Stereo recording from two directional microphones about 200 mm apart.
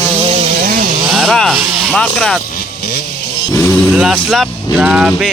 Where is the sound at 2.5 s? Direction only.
50° left (ahead or behind).